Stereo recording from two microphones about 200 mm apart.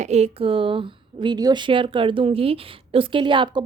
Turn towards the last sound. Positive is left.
turn(degrees=-25)  # may be behind; listen again after turning